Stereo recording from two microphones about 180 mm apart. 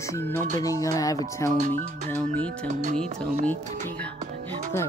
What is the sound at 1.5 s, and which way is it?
Speech, 45° right (ahead or behind).